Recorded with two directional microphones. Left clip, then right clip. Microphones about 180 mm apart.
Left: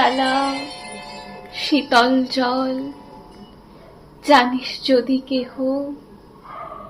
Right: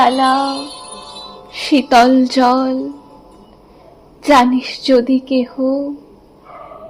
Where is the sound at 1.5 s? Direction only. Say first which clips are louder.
Right 5 dB; 60° right (ahead or behind).